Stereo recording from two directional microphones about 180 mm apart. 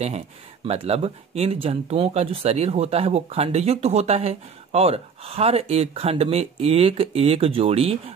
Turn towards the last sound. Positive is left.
turn(degrees=-35)  # may be behind; listen again after turning